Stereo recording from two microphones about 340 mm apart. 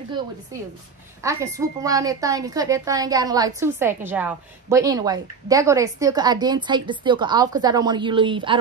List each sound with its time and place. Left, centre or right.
1.2 s a woman's voice: centre